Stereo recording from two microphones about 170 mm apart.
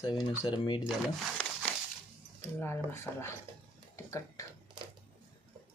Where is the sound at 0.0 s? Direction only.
25° left (ahead or behind).